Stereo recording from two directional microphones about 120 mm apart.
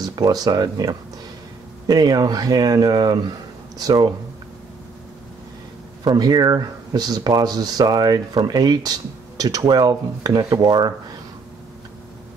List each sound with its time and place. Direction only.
0.0 s speech: 35° right (ahead or behind)
6.0 s speech: 35° right (ahead or behind)